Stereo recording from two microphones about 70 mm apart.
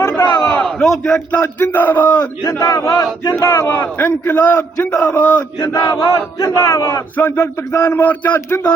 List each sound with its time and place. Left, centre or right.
0.3 s a sound: left
0.6 s battle cry: centre
1.3 s a man's voice: left
2.4 s battle cry: left
3.3 s a man's voice: left
5.8 s battle cry: left
6.1 s battle cry: left
7.2 s speech: left
7.9 s a man's voice: left